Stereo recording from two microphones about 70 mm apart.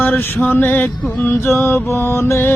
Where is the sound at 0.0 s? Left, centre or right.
Left.